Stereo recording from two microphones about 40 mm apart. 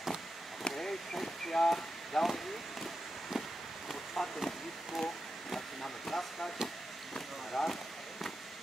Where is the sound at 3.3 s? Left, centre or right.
Centre.